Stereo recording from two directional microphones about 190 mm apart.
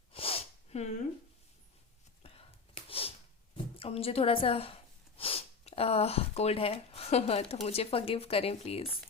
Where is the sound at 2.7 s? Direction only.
30° left (ahead or behind).